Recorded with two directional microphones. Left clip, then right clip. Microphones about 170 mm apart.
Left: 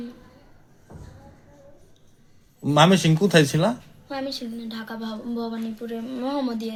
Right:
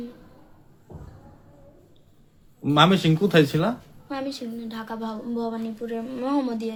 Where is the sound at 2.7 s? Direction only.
35° left (ahead or behind).